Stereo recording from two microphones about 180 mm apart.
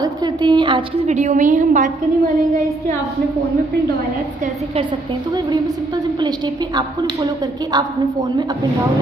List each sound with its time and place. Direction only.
0.0 s a woman's voice: 25° right (ahead or behind)
1.0 s a woman's voice: 40° right (ahead or behind)
6.2 s a woman's voice: 25° right (ahead or behind)